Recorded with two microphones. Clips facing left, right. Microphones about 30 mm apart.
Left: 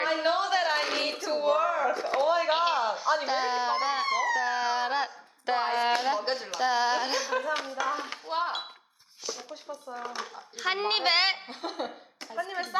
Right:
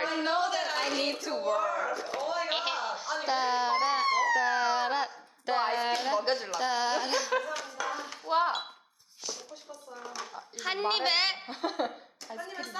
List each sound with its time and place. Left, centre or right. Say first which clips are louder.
0.0 s a sound: left 2 dB; centre
2.5 s a sound: left 6 dB; centre
2.7 s a sound: left 6 dB; centre
7.9 s dishes: left 4 dB; left
8.3 s chink: right 3 dB; centre
9.5 s speech: left 6 dB; left
10.7 s a woman's voice: left 2 dB; centre
11.4 s speech: right 2 dB; centre
12.4 s speech: left 8 dB; left